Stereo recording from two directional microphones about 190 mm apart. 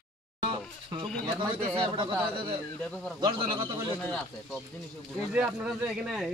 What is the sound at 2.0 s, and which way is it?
A man's voice, 25° right (ahead or behind).